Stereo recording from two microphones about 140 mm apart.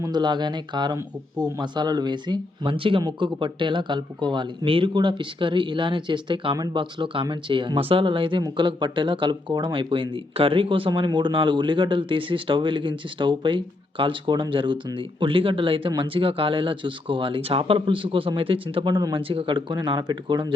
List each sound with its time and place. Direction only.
0.0 s speech: 30° right (ahead or behind)